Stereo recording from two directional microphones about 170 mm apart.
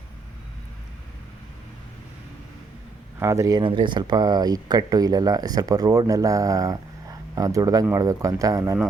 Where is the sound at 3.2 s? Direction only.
15° right (ahead or behind).